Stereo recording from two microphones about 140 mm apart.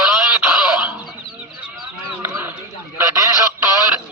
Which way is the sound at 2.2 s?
15° right (ahead or behind).